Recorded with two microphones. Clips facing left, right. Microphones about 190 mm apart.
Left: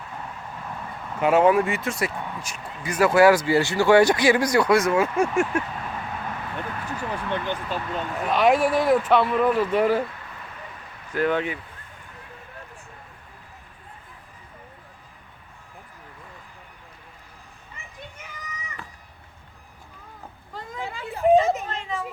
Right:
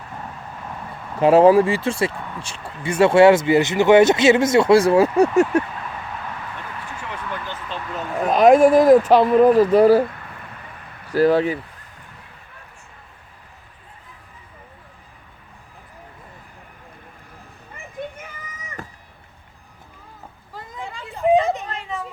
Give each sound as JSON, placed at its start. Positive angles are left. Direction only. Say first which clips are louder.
{"t": 1.2, "sound": "speech", "louder": "right 6 dB", "side_deg": -35}
{"t": 7.3, "sound": "speech", "louder": "left 5 dB", "side_deg": 20}
{"t": 8.3, "sound": "speech", "louder": "right 8 dB", "side_deg": -40}
{"t": 11.1, "sound": "speech", "louder": "right 7 dB", "side_deg": -35}
{"t": 17.7, "sound": "a sound", "louder": "right 7 dB", "side_deg": -50}
{"t": 20.5, "sound": "a sound", "louder": "left 1 dB", "side_deg": 0}